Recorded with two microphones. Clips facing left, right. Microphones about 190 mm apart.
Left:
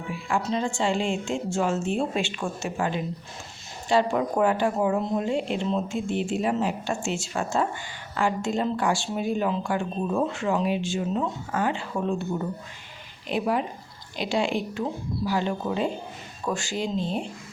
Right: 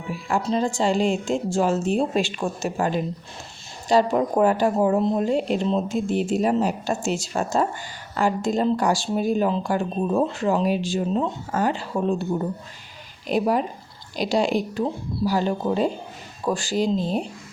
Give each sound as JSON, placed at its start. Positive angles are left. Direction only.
{"t": 0.1, "sound": "speech", "side_deg": -40}